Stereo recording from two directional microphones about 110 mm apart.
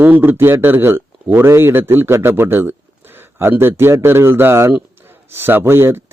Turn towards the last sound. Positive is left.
turn(degrees=-25)  # may be behind; listen again after turning